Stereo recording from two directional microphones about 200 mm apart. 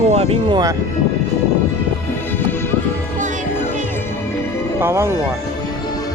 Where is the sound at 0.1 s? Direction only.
30° right (ahead or behind).